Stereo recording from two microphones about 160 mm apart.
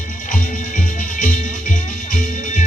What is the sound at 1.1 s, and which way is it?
Music, 50° left (ahead or behind).